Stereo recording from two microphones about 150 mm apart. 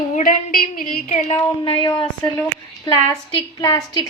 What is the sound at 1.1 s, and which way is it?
Speech, 45° left (ahead or behind).